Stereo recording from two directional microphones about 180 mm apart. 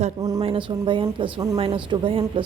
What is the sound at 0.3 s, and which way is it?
Speech, 30° right (ahead or behind).